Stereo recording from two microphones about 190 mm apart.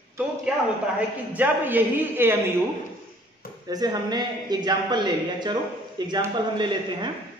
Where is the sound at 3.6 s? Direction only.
20° right (ahead or behind).